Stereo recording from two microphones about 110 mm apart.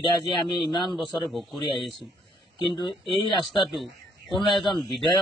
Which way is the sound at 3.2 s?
45° left (ahead or behind).